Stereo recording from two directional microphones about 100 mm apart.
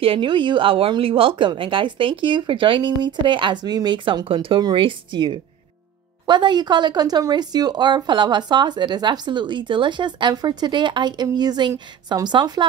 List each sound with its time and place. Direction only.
0.0 s a woman's voice: 60° right (ahead or behind)